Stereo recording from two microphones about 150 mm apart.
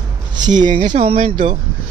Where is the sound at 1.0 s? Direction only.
40° right (ahead or behind).